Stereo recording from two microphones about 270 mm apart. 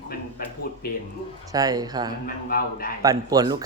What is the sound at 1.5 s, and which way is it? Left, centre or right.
Speech, centre.